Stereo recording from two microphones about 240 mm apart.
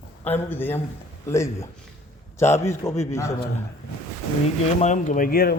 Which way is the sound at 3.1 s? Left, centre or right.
Centre.